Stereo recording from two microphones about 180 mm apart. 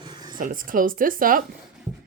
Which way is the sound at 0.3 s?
50° right (ahead or behind).